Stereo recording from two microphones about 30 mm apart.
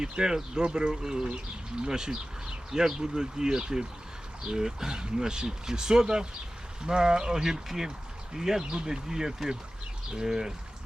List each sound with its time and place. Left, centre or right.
0.0 s speech: right